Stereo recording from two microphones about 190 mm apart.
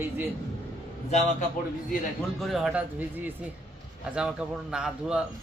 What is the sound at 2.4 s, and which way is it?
A man's voice, centre (ahead or behind).